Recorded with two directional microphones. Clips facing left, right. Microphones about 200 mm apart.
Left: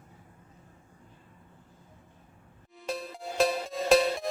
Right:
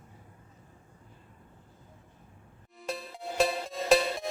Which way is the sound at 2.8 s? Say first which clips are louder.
Left 2 dB; centre (ahead or behind).